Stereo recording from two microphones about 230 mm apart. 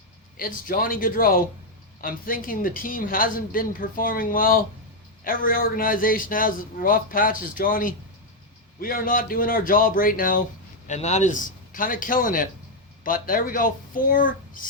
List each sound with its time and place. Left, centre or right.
0.3 s speech: left